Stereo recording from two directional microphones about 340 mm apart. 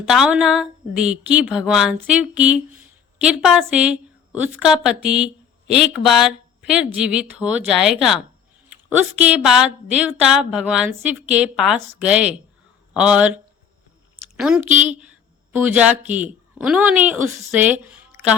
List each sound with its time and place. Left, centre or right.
0.0 s a man's voice: centre